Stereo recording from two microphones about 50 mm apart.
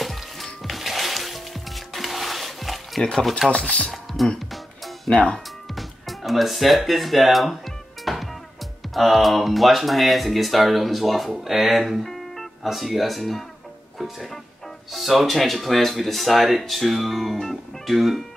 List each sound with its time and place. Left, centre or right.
0.0 s music: centre
3.0 s speech: centre
3.9 s music: centre
8.9 s speech: centre